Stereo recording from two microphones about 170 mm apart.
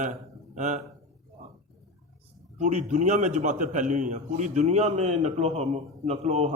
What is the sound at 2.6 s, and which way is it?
A man's voice, 45° right (ahead or behind).